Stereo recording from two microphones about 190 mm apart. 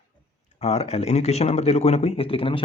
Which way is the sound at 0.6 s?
35° left (ahead or behind).